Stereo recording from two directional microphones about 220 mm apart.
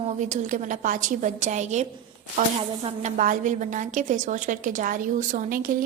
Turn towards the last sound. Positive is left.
turn(degrees=-40)  # may be behind; listen again after turning